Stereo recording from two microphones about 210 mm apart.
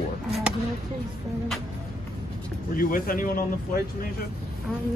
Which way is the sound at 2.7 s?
40° left (ahead or behind).